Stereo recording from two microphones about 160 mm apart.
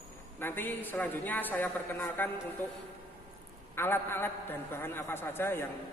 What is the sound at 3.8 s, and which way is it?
A woman's voice, 15° left (ahead or behind).